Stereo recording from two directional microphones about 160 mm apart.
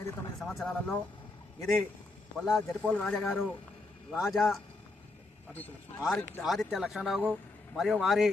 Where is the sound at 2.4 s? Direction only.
Centre (ahead or behind).